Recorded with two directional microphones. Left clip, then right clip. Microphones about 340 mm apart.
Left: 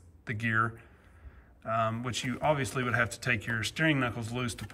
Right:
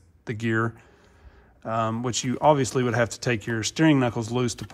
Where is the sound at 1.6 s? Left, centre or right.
Centre.